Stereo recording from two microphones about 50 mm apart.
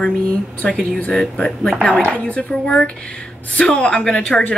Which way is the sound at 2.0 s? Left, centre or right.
Left.